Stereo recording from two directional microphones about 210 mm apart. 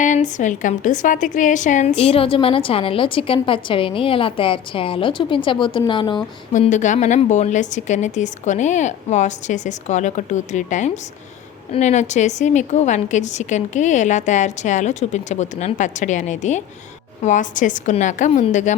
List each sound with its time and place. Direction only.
0.0 s a woman's voice: 35° left (ahead or behind)
6.5 s a woman's voice: 35° left (ahead or behind)